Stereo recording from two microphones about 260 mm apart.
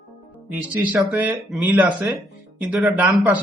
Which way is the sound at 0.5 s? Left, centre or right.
Centre.